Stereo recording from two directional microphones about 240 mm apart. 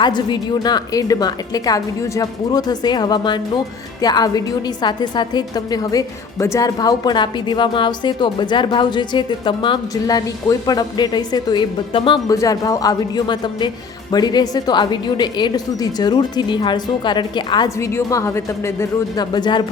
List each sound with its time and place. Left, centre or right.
0.0 s a woman's voice: centre